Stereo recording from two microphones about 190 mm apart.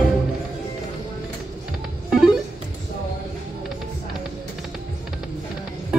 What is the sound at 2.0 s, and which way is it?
Music, centre (ahead or behind).